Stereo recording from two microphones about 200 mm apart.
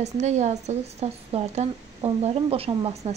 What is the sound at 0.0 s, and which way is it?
A woman's voice, 35° right (ahead or behind).